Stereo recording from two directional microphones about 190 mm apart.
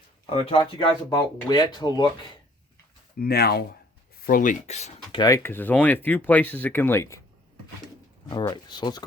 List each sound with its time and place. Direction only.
0.3 s speech: 30° left (ahead or behind)
3.2 s speech: 55° left (ahead or behind); by 5.2 s 35° left (ahead or behind)
5.2 s speech: 15° left (ahead or behind)
8.3 s speech: 20° left (ahead or behind)